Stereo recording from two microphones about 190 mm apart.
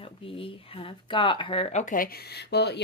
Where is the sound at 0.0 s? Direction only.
30° left (ahead or behind).